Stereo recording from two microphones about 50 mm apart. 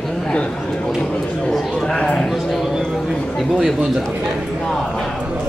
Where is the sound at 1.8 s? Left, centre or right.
Centre.